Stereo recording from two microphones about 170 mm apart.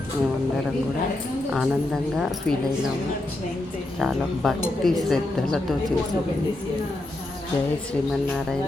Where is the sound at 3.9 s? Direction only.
Centre (ahead or behind).